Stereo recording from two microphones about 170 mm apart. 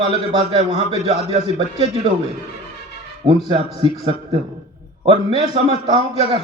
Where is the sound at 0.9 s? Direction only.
35° right (ahead or behind).